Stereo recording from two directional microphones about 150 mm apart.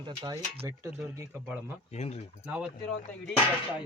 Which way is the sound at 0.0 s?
30° right (ahead or behind).